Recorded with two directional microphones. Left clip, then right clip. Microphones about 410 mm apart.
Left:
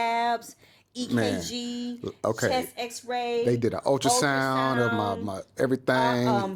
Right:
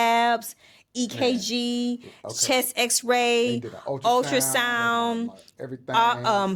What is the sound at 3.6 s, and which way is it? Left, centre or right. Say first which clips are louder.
Speech: left 7 dB; left.